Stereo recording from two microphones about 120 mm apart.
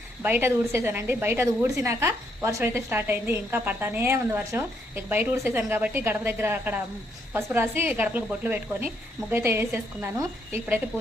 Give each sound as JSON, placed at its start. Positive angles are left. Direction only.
{"t": 0.2, "sound": "a woman's voice", "side_deg": -15}